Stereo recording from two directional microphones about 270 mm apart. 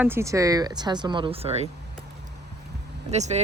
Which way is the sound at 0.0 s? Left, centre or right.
Centre.